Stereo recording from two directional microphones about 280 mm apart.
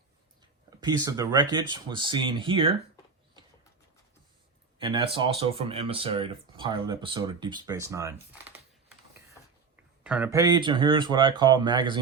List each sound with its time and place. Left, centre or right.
0.8 s speech: centre
4.8 s speech: centre
10.0 s speech: centre